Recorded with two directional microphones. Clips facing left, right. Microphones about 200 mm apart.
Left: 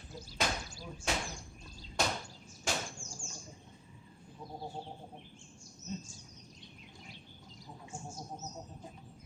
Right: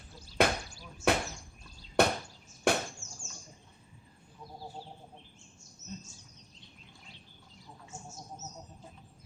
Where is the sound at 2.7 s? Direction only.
60° right (ahead or behind).